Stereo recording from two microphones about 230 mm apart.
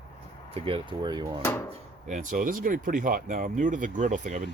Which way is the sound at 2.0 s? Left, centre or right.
Right.